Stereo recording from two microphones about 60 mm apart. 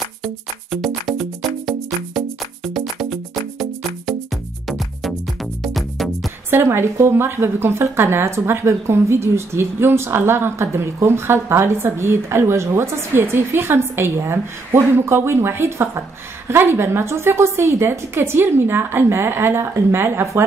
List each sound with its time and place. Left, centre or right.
0.2 s music: centre
6.5 s a woman's voice: right